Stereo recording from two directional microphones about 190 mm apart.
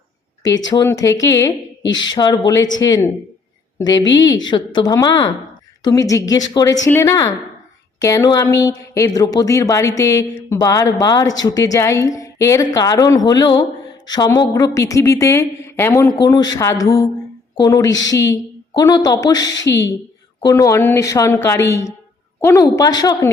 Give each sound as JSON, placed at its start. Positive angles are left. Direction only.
{"t": 0.7, "sound": "a woman's voice", "side_deg": 20}
{"t": 1.8, "sound": "speech", "side_deg": 80}
{"t": 2.1, "sound": "a woman's voice", "side_deg": 25}
{"t": 4.1, "sound": "a woman's voice", "side_deg": 20}